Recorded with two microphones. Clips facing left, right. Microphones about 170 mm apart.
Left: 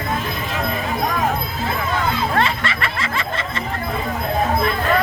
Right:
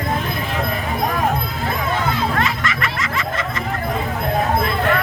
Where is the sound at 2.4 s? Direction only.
30° left (ahead or behind).